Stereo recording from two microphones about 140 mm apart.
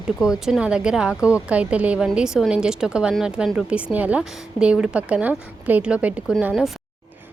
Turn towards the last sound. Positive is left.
turn(degrees=-5)  # may be behind; listen again after turning